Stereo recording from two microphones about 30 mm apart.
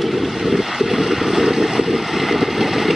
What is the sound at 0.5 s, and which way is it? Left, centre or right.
Boat, centre.